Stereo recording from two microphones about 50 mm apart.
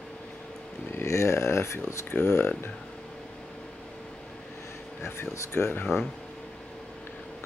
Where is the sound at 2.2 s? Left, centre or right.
Left.